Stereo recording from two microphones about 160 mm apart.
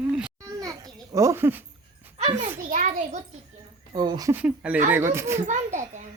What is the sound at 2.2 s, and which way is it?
Speech, 35° right (ahead or behind).